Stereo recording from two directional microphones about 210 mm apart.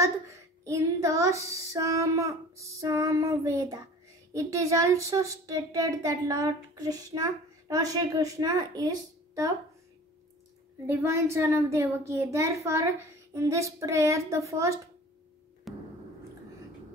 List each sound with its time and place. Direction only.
0.0 s child singing: 15° right (ahead or behind)
4.3 s a child's voice: 15° right (ahead or behind)
10.9 s a child's voice: 10° right (ahead or behind)
15.7 s a sound: centre (ahead or behind)